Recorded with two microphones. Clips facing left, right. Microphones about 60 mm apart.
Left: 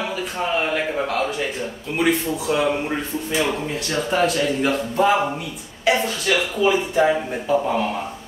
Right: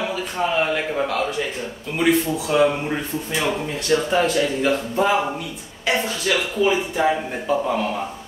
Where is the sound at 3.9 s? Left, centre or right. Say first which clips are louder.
Right 2 dB; centre.